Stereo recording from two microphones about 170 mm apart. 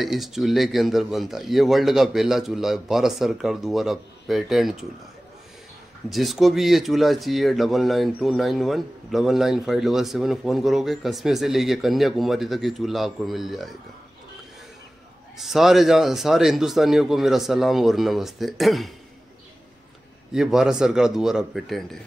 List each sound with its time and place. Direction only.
0.0 s speech: centre (ahead or behind)
6.1 s speech: centre (ahead or behind)
15.3 s speech: centre (ahead or behind)
20.3 s speech: 5° right (ahead or behind)